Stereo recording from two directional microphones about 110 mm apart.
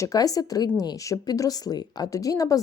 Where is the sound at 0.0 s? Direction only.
35° left (ahead or behind).